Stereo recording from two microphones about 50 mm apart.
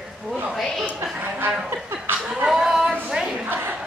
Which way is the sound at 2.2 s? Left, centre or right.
Centre.